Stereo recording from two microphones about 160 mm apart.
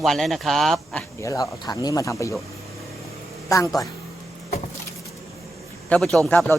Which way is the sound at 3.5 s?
20° left (ahead or behind).